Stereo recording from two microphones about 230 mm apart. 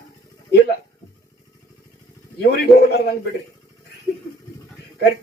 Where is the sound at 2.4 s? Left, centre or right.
Left.